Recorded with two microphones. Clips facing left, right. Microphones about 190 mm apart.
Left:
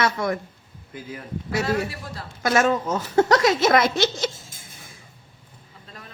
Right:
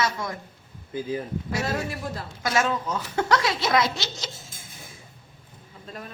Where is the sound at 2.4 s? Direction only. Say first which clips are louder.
Left 5 dB; 50° left (ahead or behind).